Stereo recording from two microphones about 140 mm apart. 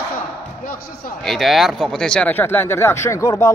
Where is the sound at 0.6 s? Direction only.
90° left.